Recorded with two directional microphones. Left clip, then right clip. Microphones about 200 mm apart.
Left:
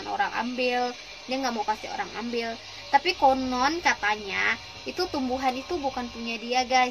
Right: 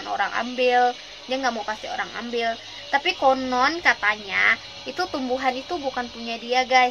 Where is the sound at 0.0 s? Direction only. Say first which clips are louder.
Right 3 dB; centre (ahead or behind).